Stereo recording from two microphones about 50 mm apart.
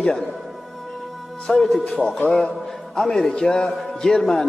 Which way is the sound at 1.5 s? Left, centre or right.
Centre.